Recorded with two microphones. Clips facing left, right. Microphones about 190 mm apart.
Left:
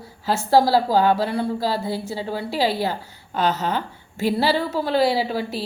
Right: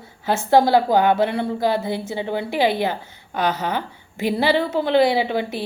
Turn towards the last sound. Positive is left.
turn(degrees=-20)  # may be behind; listen again after turning